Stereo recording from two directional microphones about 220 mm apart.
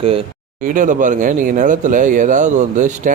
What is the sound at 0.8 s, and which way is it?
Speech, 35° right (ahead or behind).